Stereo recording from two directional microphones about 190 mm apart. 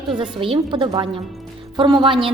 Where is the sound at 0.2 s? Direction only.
30° right (ahead or behind).